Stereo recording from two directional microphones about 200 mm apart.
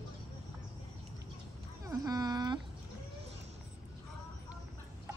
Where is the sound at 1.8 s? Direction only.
20° right (ahead or behind).